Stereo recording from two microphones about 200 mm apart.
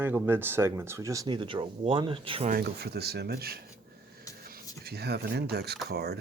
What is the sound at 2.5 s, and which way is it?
Speech, 55° right (ahead or behind).